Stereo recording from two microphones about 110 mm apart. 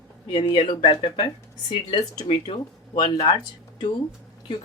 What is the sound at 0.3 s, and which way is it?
Speech, 50° left (ahead or behind).